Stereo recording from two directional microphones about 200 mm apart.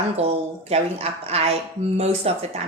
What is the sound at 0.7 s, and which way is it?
A woman's voice, 30° right (ahead or behind).